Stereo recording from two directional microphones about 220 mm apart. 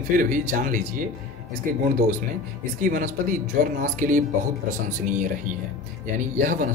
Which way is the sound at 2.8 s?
35° right (ahead or behind).